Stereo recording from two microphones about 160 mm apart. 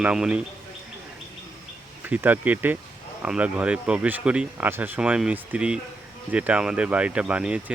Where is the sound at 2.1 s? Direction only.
10° right (ahead or behind).